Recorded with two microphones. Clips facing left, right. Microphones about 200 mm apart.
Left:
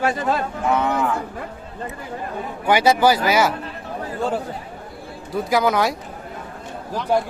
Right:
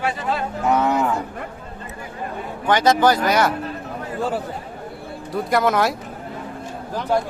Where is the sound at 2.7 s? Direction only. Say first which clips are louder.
Even; 10° left (ahead or behind).